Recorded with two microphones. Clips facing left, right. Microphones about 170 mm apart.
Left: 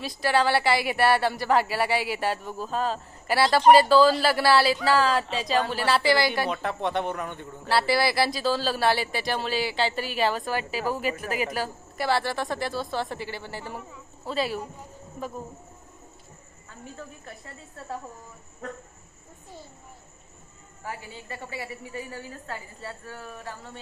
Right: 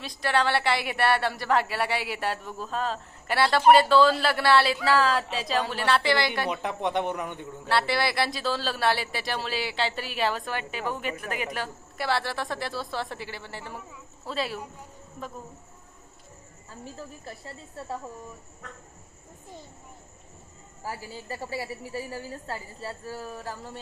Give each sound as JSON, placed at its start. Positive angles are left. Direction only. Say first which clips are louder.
{"t": 0.0, "sound": "speech", "louder": "left 2 dB", "side_deg": 5}
{"t": 6.5, "sound": "a man's voice", "louder": "even", "side_deg": -15}
{"t": 7.6, "sound": "speech", "louder": "left 3 dB", "side_deg": 5}
{"t": 16.8, "sound": "a woman's voice", "louder": "right 1 dB", "side_deg": -35}
{"t": 20.8, "sound": "a woman's voice", "louder": "right 1 dB", "side_deg": -35}